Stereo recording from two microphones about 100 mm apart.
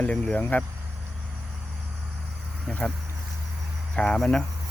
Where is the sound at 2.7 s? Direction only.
10° left (ahead or behind).